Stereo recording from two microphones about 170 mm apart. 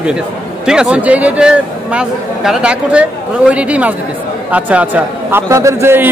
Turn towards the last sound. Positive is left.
turn(degrees=-15)  # may be behind; listen again after turning